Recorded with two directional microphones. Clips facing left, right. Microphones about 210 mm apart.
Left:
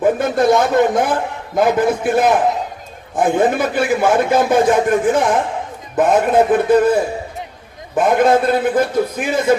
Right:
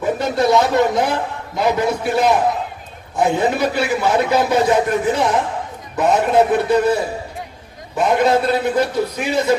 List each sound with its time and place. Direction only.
0.0 s a man's voice: 50° left (ahead or behind)
7.9 s a man's voice: 50° left (ahead or behind)